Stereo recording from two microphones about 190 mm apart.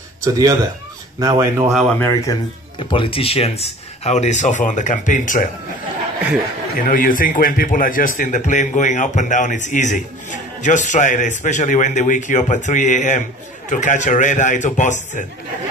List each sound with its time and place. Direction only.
0.2 s speech: 20° right (ahead or behind)
1.7 s speech: centre (ahead or behind)
2.0 s speech: 15° left (ahead or behind)
2.8 s a man's voice: 25° left (ahead or behind); by 5.5 s 45° left (ahead or behind)
6.9 s a man's voice: 45° left (ahead or behind)